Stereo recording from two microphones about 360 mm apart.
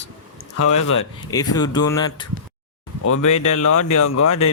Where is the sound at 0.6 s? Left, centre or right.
Left.